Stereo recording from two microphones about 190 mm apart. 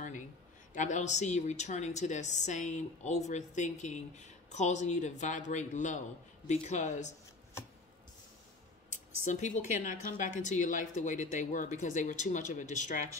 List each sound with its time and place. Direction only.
0.7 s a woman's voice: 40° left (ahead or behind)
8.9 s a woman's voice: 40° left (ahead or behind)